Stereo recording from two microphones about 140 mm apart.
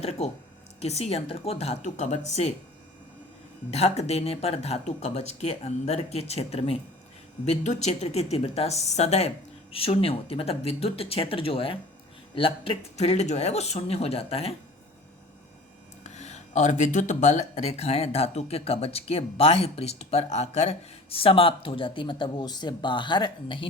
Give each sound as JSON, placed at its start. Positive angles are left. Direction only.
{"t": 0.0, "sound": "speech", "side_deg": 50}
{"t": 3.7, "sound": "speech", "side_deg": 50}
{"t": 16.0, "sound": "speech", "side_deg": 55}